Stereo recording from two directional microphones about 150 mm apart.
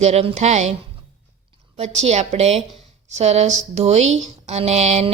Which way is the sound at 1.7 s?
45° right (ahead or behind).